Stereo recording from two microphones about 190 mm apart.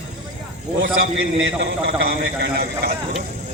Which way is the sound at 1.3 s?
75° right (ahead or behind).